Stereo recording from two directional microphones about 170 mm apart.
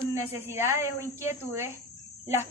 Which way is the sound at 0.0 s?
15° right (ahead or behind).